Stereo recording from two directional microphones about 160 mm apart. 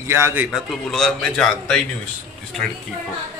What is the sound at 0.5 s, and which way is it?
A man's voice, centre (ahead or behind).